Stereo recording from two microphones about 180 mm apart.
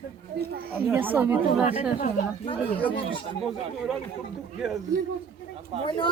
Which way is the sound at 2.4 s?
30° left (ahead or behind).